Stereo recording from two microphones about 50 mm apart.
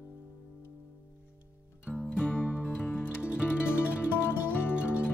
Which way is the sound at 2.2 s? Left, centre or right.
Left.